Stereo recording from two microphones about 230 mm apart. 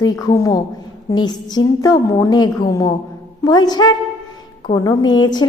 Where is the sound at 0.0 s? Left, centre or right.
Centre.